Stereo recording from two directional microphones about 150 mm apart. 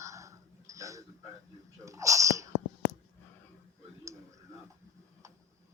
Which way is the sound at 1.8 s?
20° right (ahead or behind).